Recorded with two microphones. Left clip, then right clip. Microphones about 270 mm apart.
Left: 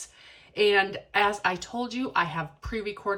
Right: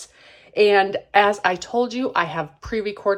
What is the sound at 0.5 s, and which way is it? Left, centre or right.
Speech, centre.